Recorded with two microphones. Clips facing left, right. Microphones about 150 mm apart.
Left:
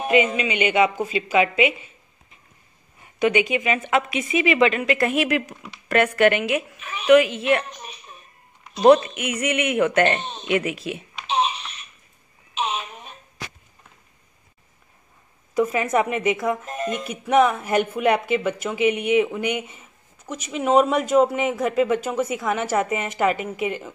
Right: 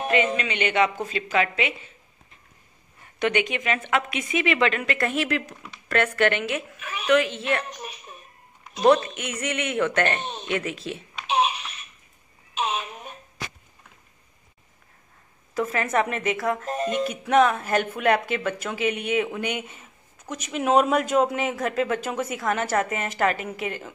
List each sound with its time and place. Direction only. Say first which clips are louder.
0.0 s speech: left 4 dB; 10° left (ahead or behind)
3.2 s speech: left 4 dB; 5° left (ahead or behind)
9.1 s speech: left 5 dB; 10° left (ahead or behind)
11.2 s a sound: even; 10° right (ahead or behind)
15.5 s speech: left 4 dB; 10° left (ahead or behind)
16.6 s speech: right 1 dB; 35° right (ahead or behind)
16.9 s speech: left 2 dB; 5° left (ahead or behind)